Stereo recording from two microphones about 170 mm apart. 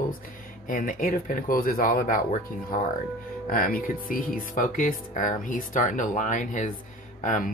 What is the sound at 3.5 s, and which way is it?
Speech, 55° left (ahead or behind).